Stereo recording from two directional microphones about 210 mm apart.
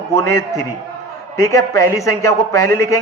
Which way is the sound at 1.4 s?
15° left (ahead or behind).